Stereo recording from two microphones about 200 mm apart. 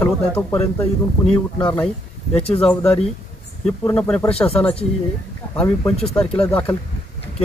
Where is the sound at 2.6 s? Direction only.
5° left (ahead or behind).